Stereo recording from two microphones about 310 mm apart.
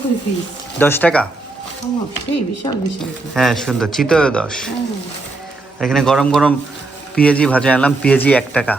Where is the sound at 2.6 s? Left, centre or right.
Centre.